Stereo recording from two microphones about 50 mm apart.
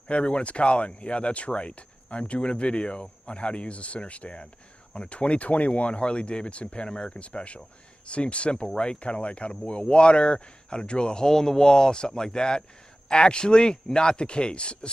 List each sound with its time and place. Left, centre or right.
0.1 s speech: left